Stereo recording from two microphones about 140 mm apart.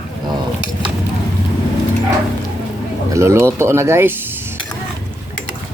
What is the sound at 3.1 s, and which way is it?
Speech, 20° right (ahead or behind).